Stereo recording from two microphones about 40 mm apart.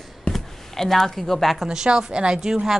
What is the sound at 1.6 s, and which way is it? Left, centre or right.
Speech, centre.